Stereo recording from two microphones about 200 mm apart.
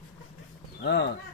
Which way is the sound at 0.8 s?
55° left (ahead or behind).